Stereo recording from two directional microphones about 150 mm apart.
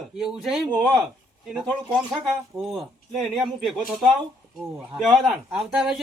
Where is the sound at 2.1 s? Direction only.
Centre (ahead or behind).